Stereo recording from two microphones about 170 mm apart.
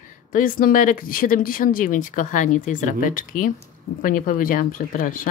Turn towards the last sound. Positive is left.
turn(degrees=55)  # may be behind; listen again after turning